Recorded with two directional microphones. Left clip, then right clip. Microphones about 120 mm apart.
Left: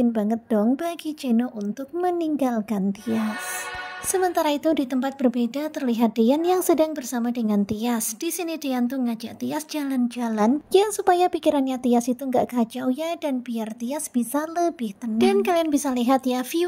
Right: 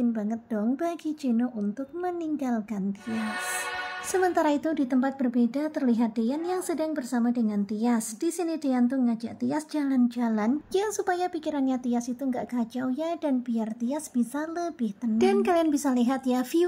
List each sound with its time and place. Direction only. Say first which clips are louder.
0.0 s a woman's voice: left 6 dB; 50° left (ahead or behind)
3.1 s music: left 5 dB; centre (ahead or behind)
4.3 s a woman's voice: left 3 dB; 40° left (ahead or behind)